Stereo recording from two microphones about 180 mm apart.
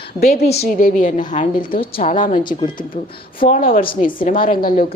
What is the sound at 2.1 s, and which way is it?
Speech, 45° left (ahead or behind).